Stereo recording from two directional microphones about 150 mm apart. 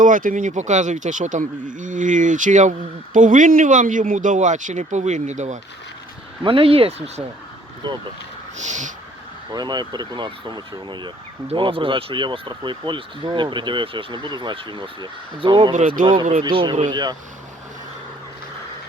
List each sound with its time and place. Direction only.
0.0 s speech: 60° right (ahead or behind)
6.4 s speech: 35° right (ahead or behind)
8.5 s a sound: 55° right (ahead or behind)
9.5 s speech: 25° right (ahead or behind)
15.7 s a sound: 45° right (ahead or behind)
16.4 s speech: 30° right (ahead or behind)